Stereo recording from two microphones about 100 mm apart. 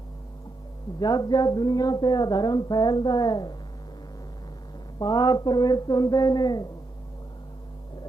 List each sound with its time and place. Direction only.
0.9 s a woman's voice: 45° left (ahead or behind)
4.9 s a woman's voice: 45° left (ahead or behind)